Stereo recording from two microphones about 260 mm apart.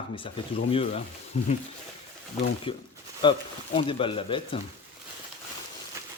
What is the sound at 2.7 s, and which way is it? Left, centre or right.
Speech, centre.